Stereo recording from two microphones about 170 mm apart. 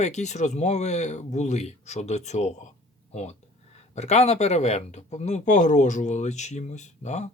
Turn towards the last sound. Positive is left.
turn(degrees=45)  # may be behind; listen again after turning